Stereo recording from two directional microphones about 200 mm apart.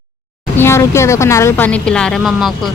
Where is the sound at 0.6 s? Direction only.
15° left (ahead or behind).